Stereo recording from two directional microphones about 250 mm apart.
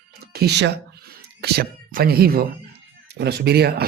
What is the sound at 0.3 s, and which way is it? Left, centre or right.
Speech, right.